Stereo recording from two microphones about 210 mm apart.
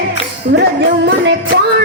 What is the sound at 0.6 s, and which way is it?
Music, 55° right (ahead or behind).